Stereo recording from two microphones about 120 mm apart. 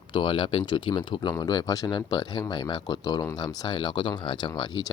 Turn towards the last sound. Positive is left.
turn(degrees=35)  # may be behind; listen again after turning